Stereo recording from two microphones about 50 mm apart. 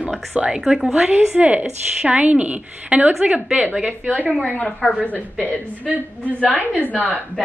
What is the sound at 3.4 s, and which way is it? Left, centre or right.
Speech, centre.